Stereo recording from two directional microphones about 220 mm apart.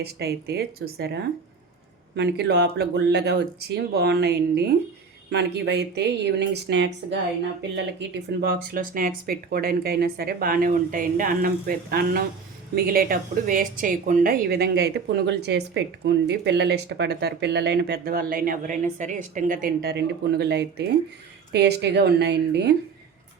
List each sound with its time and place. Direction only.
0.0 s speech: 45° right (ahead or behind)